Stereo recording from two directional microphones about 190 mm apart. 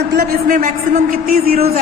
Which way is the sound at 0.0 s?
55° right (ahead or behind).